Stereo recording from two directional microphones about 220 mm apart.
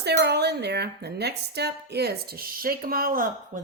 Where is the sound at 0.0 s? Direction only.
50° right (ahead or behind).